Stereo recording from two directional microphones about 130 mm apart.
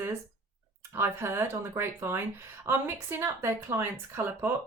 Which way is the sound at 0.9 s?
20° right (ahead or behind).